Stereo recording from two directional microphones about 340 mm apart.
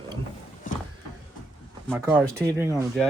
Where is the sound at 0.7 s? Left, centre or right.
Left.